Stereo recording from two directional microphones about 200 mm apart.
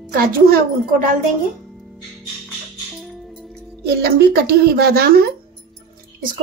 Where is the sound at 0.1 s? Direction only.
45° right (ahead or behind).